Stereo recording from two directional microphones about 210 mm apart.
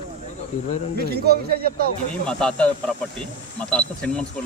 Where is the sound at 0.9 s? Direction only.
50° right (ahead or behind).